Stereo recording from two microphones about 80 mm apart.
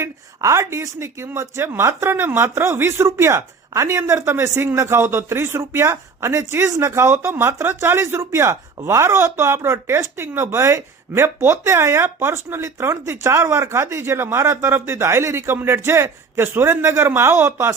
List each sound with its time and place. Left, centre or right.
0.0 s speech: right